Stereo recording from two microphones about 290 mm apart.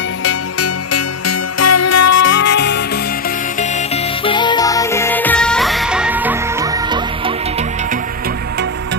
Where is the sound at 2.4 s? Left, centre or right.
Left.